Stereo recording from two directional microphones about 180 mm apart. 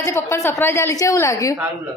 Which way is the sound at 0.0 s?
15° left (ahead or behind).